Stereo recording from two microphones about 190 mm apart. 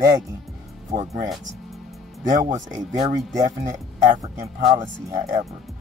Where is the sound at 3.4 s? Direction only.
40° right (ahead or behind).